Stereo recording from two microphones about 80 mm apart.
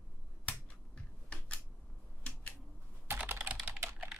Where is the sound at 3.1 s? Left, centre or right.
Right.